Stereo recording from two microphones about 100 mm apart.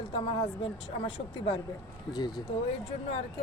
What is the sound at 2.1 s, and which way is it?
Speech, 45° left (ahead or behind).